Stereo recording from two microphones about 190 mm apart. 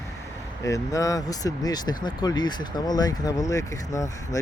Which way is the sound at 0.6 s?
15° left (ahead or behind).